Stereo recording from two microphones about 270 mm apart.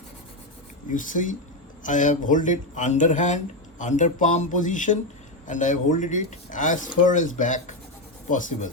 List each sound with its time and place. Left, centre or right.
0.9 s speech: left